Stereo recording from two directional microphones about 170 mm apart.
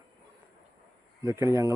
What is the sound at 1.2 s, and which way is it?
Speech, 15° right (ahead or behind).